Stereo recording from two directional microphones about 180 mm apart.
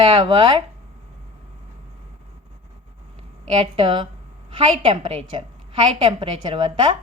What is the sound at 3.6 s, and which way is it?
A woman's voice, 30° right (ahead or behind).